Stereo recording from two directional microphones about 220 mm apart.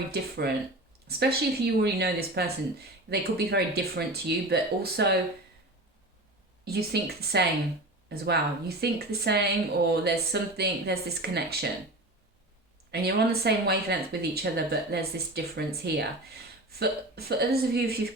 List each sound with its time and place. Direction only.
0.1 s speech: 45° right (ahead or behind)
6.7 s speech: 45° right (ahead or behind)
12.9 s speech: 45° right (ahead or behind)